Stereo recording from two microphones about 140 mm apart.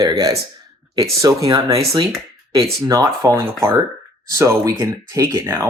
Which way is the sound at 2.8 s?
25° right (ahead or behind).